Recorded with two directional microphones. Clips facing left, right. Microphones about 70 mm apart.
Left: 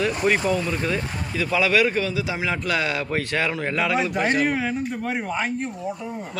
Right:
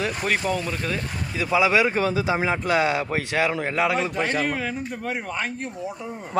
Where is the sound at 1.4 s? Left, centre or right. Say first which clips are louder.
Even; centre.